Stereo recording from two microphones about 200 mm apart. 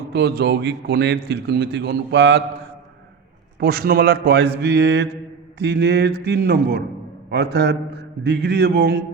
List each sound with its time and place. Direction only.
0.1 s a man's voice: 55° right (ahead or behind)
3.6 s a man's voice: 50° right (ahead or behind)